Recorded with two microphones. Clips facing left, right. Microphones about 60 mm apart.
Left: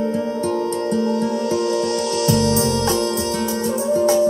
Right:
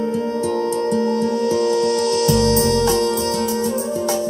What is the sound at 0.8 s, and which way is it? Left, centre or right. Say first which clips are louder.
Music: right 1 dB; right.